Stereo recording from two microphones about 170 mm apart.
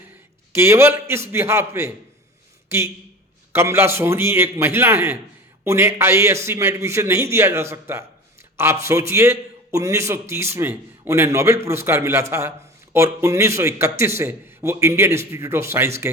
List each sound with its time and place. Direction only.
0.5 s a man's voice: 15° right (ahead or behind)